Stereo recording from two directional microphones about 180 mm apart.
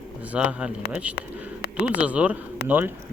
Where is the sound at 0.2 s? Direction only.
10° right (ahead or behind).